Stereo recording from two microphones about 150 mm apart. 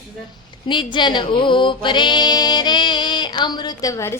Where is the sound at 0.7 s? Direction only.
30° left (ahead or behind).